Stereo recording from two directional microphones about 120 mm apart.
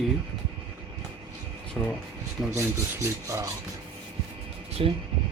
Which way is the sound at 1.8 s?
10° left (ahead or behind).